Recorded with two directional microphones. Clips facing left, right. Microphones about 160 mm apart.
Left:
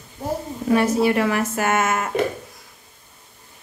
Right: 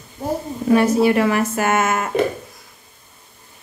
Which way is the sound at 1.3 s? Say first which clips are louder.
Right 3 dB; 15° right (ahead or behind).